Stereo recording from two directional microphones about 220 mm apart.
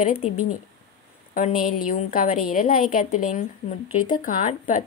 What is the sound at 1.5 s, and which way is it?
Speech, 90° left.